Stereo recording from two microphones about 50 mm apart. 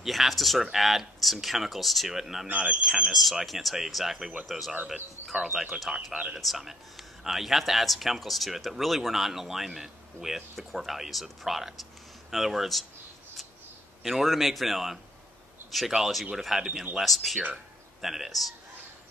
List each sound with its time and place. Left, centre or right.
0.0 s speech: centre
2.4 s speech: right
3.1 s speech: centre
14.0 s speech: centre